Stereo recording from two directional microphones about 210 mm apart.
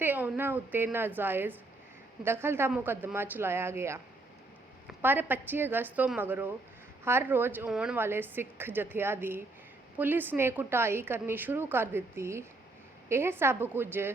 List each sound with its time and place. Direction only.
0.0 s a woman's voice: 10° right (ahead or behind)
5.0 s a woman's voice: 10° right (ahead or behind)